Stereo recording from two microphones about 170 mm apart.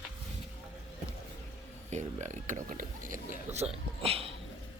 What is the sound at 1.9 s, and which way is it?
Speech, 45° right (ahead or behind).